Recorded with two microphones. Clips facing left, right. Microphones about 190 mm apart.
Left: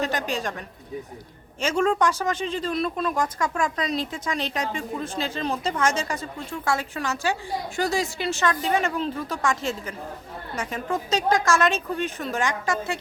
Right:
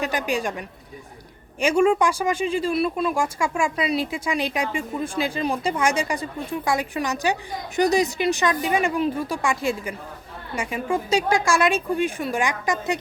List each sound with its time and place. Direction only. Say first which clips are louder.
0.0 s a woman's voice: right 2 dB; 10° right (ahead or behind)
1.6 s speech: right 4 dB; 15° right (ahead or behind)